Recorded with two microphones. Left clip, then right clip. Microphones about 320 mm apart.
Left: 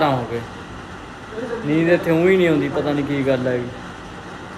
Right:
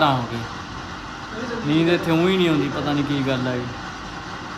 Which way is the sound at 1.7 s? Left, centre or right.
Centre.